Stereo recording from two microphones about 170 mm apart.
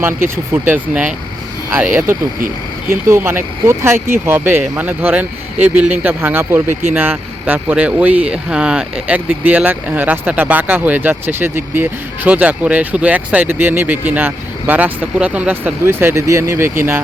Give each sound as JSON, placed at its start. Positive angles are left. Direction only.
{"t": 0.0, "sound": "speech", "side_deg": -15}
{"t": 2.9, "sound": "speech", "side_deg": -15}